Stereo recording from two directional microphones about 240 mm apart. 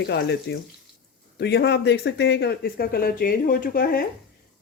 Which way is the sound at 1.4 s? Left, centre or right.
Left.